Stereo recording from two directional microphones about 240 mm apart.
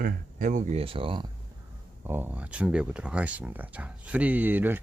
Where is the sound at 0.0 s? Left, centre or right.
Right.